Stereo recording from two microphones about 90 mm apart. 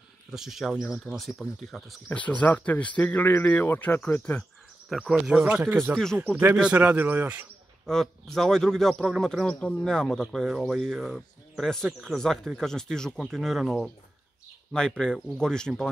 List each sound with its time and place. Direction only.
0.3 s speech: 5° right (ahead or behind)
2.1 s speech: 15° left (ahead or behind)
4.4 s speech: centre (ahead or behind)
5.4 s a man's voice: 20° right (ahead or behind)
7.8 s speech: 5° left (ahead or behind)